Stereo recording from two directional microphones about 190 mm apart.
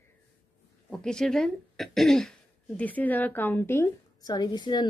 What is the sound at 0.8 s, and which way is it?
A woman's voice, 5° left (ahead or behind).